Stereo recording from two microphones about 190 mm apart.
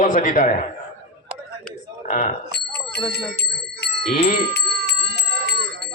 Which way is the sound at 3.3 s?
60° left (ahead or behind).